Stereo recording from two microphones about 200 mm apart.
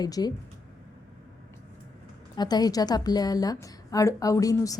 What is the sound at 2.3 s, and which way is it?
A woman's voice, 20° left (ahead or behind).